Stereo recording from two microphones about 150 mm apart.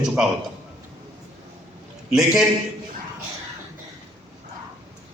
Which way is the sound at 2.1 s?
5° right (ahead or behind).